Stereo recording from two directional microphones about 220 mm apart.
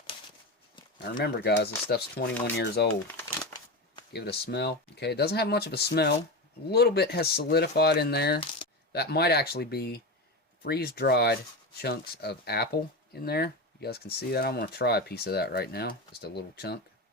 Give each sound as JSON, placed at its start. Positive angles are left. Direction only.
{"t": 1.1, "sound": "speech", "side_deg": 45}
{"t": 4.1, "sound": "speech", "side_deg": 45}